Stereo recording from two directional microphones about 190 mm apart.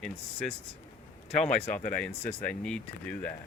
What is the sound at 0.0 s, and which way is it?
Speech, 5° left (ahead or behind).